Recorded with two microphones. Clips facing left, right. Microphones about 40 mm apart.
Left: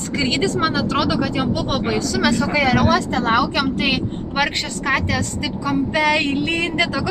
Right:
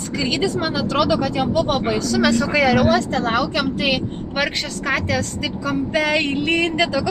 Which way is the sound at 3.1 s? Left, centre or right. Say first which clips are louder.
Left 2 dB; centre.